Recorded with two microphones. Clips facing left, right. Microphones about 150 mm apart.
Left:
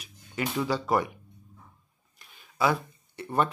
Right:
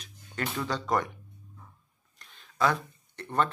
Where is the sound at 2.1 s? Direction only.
5° left (ahead or behind).